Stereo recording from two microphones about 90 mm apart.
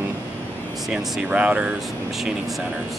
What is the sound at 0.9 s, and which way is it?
Speech, 15° right (ahead or behind).